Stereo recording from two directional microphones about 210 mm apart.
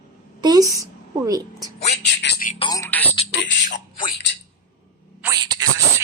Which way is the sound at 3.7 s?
40° left (ahead or behind).